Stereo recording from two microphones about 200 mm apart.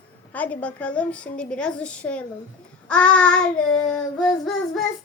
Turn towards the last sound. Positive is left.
turn(degrees=5)  # may be behind; listen again after turning